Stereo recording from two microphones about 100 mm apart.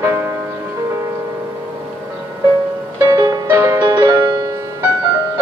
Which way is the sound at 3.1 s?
40° right (ahead or behind).